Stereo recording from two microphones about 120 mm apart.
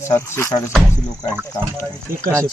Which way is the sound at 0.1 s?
20° left (ahead or behind).